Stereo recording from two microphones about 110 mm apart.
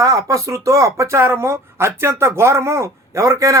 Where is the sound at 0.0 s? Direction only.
30° right (ahead or behind).